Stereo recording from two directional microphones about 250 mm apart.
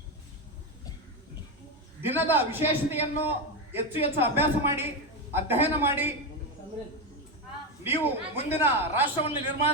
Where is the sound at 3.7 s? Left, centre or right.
Centre.